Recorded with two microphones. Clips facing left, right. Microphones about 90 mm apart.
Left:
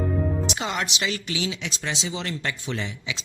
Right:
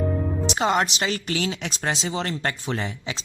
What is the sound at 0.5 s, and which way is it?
Speech, 45° right (ahead or behind).